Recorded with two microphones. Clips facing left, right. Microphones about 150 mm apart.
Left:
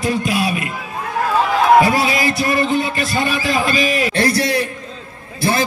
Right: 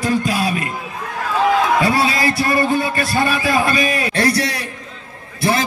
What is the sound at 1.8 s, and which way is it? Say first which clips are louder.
A man's voice: even; 20° left (ahead or behind).